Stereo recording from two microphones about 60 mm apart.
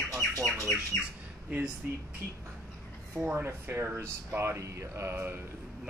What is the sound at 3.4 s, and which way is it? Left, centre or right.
Speech, right.